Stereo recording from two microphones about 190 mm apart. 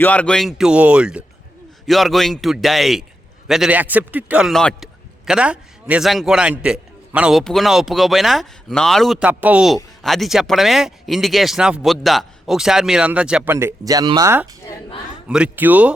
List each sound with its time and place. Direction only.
0.0 s a man's voice: 10° left (ahead or behind); by 15.9 s 10° right (ahead or behind)